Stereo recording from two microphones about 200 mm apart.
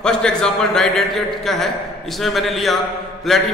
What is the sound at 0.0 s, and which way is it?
A man's voice, 5° left (ahead or behind).